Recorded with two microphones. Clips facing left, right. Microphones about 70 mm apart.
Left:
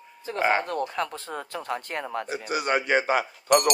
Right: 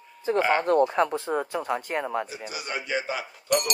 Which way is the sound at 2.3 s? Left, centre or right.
Left.